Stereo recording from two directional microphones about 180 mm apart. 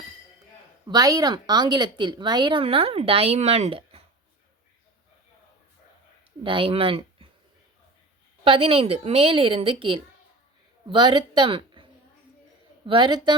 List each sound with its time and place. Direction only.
0.9 s speech: 20° right (ahead or behind)
6.4 s speech: 30° right (ahead or behind)
8.4 s a woman's voice: 30° right (ahead or behind)